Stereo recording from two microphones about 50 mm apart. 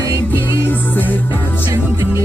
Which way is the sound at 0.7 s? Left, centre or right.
Left.